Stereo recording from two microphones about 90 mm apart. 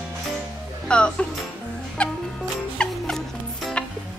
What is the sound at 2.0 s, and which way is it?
Music, 10° left (ahead or behind).